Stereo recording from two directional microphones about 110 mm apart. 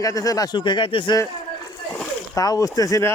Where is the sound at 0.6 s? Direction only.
50° left (ahead or behind).